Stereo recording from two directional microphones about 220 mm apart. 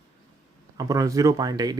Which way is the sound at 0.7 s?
15° right (ahead or behind).